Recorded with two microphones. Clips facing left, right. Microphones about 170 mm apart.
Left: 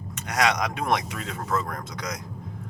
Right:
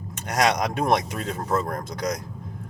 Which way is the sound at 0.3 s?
40° right (ahead or behind).